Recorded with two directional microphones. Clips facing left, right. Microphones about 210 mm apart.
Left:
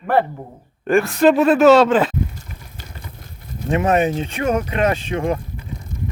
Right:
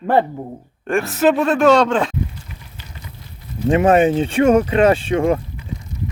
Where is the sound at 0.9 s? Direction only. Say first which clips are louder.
Left 2 dB; centre (ahead or behind).